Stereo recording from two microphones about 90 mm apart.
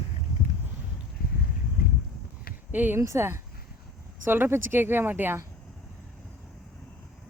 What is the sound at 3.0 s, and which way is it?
Speech, 30° right (ahead or behind).